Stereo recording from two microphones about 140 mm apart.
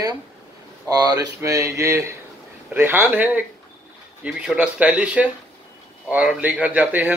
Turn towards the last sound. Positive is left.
turn(degrees=-10)  # may be behind; listen again after turning